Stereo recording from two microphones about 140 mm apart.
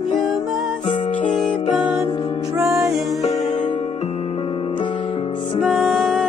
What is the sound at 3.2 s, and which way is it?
Music, 55° left (ahead or behind).